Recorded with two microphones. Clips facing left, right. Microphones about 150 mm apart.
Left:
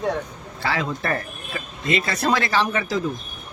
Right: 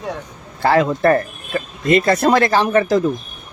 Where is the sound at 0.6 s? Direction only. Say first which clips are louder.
Right 11 dB; 50° right (ahead or behind).